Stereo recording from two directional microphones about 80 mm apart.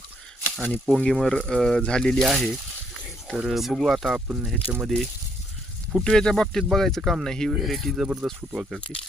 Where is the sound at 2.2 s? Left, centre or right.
Centre.